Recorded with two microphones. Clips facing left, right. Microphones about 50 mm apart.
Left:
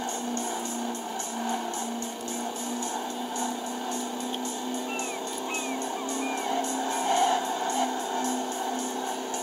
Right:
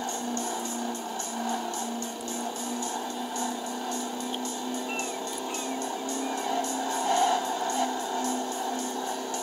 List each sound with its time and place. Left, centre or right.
6.4 s music: centre